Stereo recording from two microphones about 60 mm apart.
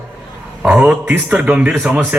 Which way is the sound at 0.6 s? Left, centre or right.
Centre.